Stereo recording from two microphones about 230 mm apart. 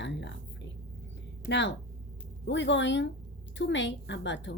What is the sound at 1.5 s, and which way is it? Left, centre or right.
A woman's voice, left.